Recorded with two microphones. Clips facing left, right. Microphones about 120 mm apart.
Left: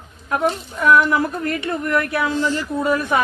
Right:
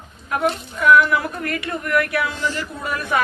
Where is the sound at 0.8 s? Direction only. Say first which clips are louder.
Even; 30° left (ahead or behind).